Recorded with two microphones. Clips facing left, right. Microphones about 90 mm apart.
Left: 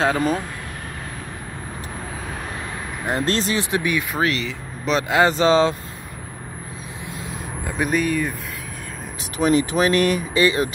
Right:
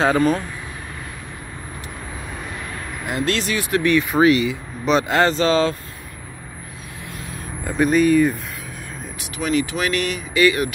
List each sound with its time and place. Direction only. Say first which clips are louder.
0.0 s speech: right 3 dB; centre (ahead or behind)
3.1 s speech: left 1 dB; 35° left (ahead or behind)
3.7 s speech: right 7 dB; 10° left (ahead or behind)
4.1 s speech: right 7 dB; 5° right (ahead or behind)
5.2 s speech: left 1 dB; 15° left (ahead or behind)
7.6 s speech: right 5 dB; centre (ahead or behind)
9.4 s speech: left 3 dB; 35° left (ahead or behind)